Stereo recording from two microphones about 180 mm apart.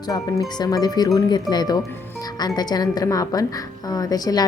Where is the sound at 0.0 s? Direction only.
20° left (ahead or behind).